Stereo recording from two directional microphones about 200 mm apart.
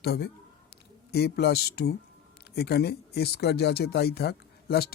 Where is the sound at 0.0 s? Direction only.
55° left (ahead or behind).